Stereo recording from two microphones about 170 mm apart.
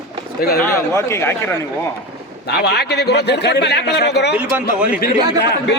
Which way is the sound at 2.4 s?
80° left.